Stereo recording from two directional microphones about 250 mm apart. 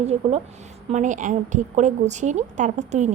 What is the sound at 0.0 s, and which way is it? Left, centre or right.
A woman's voice, right.